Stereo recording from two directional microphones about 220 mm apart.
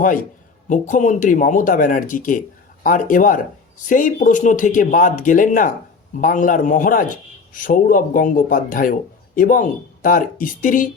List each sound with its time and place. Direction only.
0.0 s a man's voice: 35° left (ahead or behind)